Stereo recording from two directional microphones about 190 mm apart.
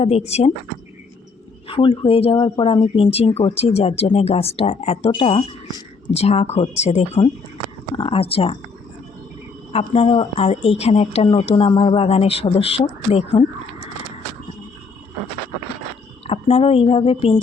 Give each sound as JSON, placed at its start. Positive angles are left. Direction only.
{"t": 0.0, "sound": "speech", "side_deg": 35}
{"t": 1.6, "sound": "speech", "side_deg": 30}
{"t": 9.7, "sound": "speech", "side_deg": 30}
{"t": 16.2, "sound": "speech", "side_deg": 30}